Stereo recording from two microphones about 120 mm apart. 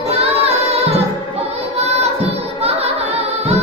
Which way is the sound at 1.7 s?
60° right (ahead or behind).